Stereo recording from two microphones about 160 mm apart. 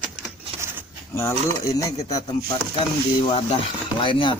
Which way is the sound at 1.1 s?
15° left (ahead or behind).